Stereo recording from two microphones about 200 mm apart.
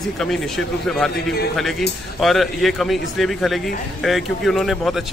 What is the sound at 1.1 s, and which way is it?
Speech, 50° left (ahead or behind).